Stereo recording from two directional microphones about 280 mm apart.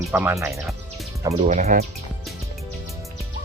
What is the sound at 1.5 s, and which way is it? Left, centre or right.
Speech, right.